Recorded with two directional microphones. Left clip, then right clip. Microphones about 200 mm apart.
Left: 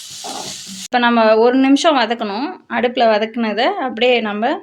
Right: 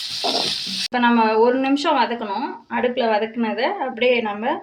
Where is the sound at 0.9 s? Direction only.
50° left (ahead or behind).